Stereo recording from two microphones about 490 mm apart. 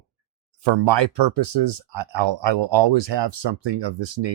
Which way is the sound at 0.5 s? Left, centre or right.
Right.